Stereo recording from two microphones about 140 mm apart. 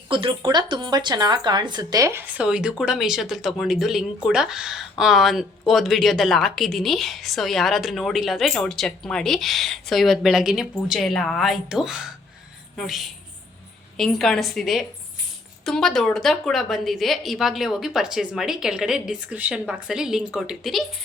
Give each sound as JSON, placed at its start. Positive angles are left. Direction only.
{"t": 0.1, "sound": "speech", "side_deg": -35}
{"t": 2.4, "sound": "speech", "side_deg": -5}